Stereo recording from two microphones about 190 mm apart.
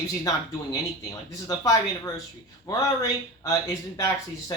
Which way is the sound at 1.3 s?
20° left (ahead or behind).